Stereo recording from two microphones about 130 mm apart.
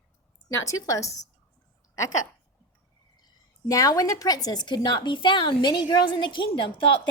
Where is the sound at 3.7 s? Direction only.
25° left (ahead or behind).